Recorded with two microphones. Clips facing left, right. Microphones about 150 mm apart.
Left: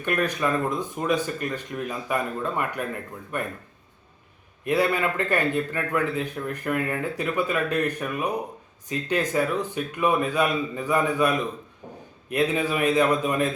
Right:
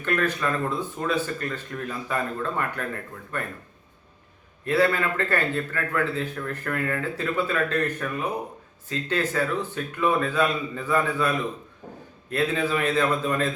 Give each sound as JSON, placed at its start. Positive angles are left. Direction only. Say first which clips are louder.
{"t": 0.0, "sound": "a man's voice", "louder": "left 1 dB", "side_deg": 15}
{"t": 4.6, "sound": "a man's voice", "louder": "even", "side_deg": 15}